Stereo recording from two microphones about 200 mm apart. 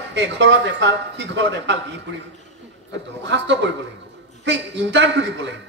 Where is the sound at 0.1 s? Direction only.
60° right (ahead or behind).